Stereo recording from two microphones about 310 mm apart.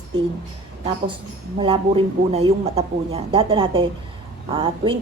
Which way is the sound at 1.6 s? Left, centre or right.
Centre.